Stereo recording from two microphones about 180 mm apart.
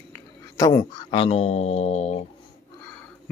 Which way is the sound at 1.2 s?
35° left (ahead or behind).